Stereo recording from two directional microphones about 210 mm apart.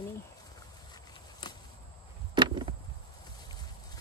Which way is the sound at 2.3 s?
25° right (ahead or behind).